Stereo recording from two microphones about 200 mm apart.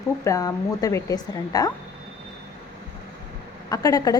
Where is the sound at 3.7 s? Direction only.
15° left (ahead or behind).